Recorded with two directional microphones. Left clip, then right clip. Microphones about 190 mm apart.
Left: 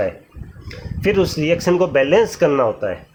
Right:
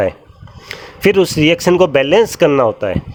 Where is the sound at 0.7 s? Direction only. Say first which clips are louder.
Right 6 dB; 55° right (ahead or behind).